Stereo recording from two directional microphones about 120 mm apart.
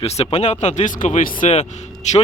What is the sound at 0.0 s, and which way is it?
Speech, 60° left (ahead or behind).